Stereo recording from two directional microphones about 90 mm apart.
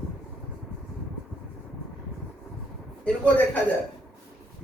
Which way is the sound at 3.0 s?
15° left (ahead or behind).